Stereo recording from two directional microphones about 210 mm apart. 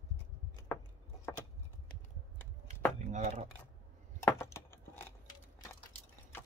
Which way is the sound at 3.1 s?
35° right (ahead or behind).